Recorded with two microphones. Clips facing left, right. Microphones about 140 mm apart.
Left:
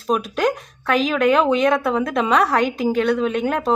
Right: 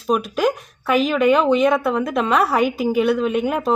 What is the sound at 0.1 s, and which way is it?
A woman's voice, centre (ahead or behind).